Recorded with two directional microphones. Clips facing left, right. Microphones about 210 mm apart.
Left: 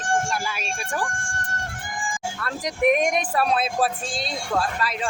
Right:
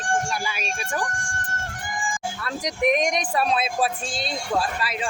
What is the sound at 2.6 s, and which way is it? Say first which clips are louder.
Speech: left 2 dB; 5° left (ahead or behind).